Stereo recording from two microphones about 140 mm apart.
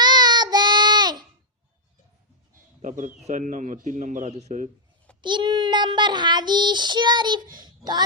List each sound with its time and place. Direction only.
0.0 s child singing: 30° right (ahead or behind)
2.8 s speech: 65° right (ahead or behind)
5.2 s child singing: 35° right (ahead or behind)